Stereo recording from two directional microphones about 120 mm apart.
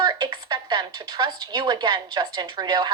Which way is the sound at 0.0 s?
35° right (ahead or behind).